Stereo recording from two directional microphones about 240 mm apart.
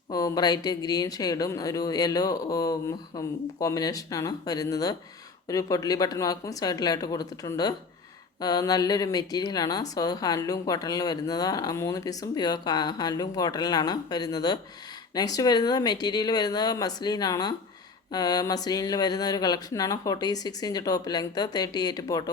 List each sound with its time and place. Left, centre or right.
0.1 s a woman's voice: centre